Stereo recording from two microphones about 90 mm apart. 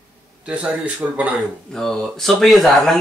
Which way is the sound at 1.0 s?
20° right (ahead or behind).